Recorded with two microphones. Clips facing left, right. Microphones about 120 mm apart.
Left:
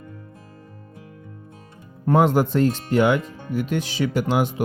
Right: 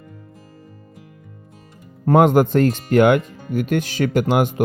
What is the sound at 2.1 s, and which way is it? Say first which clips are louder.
Speech: right 4 dB; 55° right (ahead or behind).